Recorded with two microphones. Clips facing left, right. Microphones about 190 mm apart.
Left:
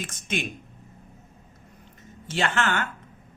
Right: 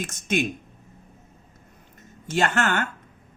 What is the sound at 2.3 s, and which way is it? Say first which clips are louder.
Speech: right 3 dB; 45° right (ahead or behind).